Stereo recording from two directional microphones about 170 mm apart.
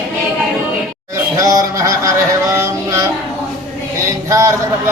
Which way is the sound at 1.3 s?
20° right (ahead or behind).